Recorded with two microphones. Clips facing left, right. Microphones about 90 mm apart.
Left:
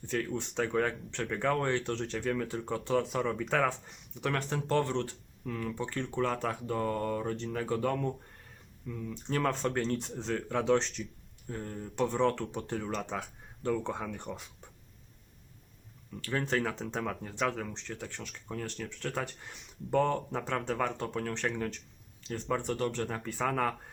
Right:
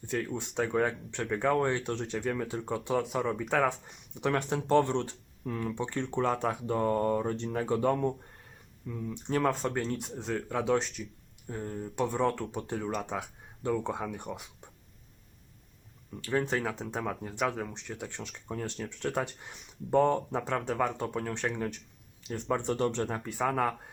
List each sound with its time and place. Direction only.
0.1 s speech: 15° right (ahead or behind)
16.2 s speech: 15° right (ahead or behind)